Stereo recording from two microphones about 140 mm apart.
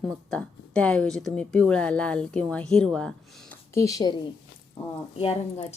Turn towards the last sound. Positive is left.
turn(degrees=45)  # may be behind; listen again after turning